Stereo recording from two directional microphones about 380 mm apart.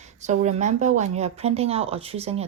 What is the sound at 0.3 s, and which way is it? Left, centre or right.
A woman's voice, centre.